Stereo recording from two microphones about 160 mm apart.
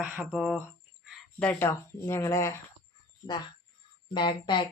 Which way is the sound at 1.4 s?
10° left (ahead or behind).